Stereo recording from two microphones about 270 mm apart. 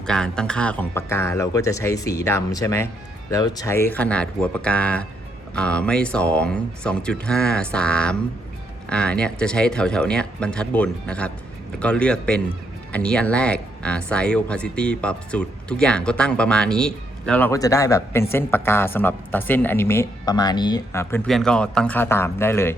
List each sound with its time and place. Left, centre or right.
0.0 s speech: centre